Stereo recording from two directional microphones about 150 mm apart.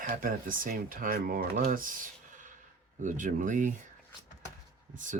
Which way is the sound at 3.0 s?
60° right (ahead or behind).